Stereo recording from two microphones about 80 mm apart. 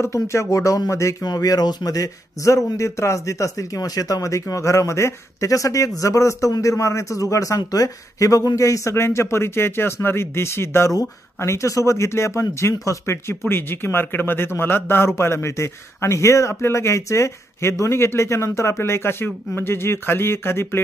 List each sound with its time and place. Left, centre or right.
0.0 s speech: left
1.2 s speech: left